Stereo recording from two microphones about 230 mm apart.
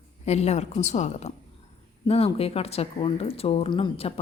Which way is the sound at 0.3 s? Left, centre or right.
Left.